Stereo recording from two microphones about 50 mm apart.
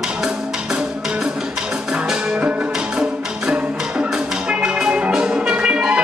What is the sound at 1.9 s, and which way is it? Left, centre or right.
Music, centre.